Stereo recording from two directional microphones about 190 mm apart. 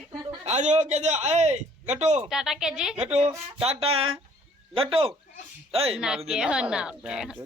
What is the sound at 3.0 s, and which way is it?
Speech, 35° right (ahead or behind).